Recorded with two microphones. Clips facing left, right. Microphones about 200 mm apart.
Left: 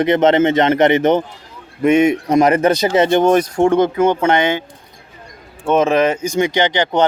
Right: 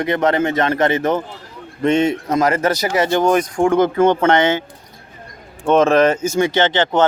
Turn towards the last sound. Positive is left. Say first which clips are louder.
# even
turn(degrees=15)  # may be behind; listen again after turning